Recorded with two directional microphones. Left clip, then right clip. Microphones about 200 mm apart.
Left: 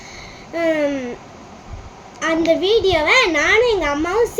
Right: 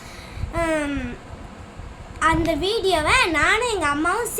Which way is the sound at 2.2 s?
45° right (ahead or behind).